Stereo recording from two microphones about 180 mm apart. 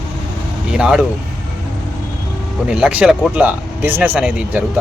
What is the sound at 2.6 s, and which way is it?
Speech, 5° right (ahead or behind).